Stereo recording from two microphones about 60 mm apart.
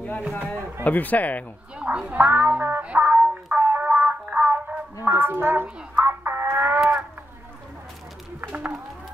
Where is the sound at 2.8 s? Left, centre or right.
Right.